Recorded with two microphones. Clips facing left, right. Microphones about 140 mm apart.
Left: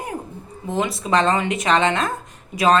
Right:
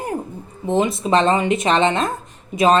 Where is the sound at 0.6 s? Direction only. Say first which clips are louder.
Right 5 dB; 25° right (ahead or behind).